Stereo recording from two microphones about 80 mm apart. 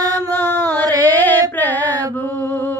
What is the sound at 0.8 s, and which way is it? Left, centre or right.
Music, right.